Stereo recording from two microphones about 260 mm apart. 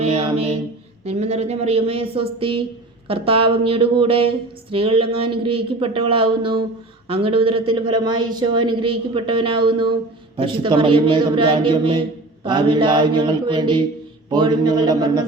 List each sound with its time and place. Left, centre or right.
0.0 s mantra: right
1.0 s a man's voice: right